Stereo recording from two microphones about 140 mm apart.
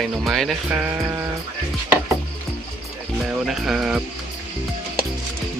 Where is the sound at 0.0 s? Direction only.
Centre (ahead or behind).